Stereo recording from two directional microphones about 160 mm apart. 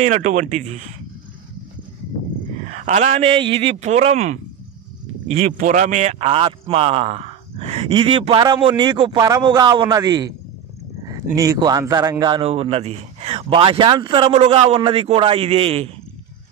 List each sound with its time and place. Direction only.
0.0 s a man's voice: 50° right (ahead or behind)
2.6 s a man's voice: 50° right (ahead or behind)
5.4 s speech: 55° right (ahead or behind); by 15.9 s 40° right (ahead or behind)